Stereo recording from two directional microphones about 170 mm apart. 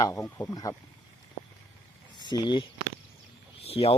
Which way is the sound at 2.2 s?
25° left (ahead or behind).